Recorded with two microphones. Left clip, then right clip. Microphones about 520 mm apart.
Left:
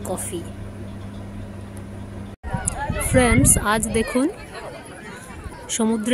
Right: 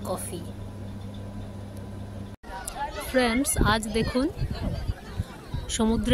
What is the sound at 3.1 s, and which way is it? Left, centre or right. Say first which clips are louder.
Speech: left 6 dB; right.